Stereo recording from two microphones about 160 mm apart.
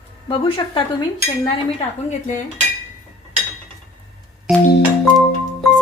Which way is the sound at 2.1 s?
50° left (ahead or behind).